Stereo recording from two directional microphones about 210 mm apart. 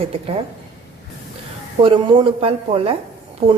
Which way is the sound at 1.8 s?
25° right (ahead or behind).